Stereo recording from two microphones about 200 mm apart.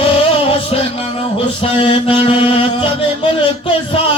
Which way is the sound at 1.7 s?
25° left (ahead or behind).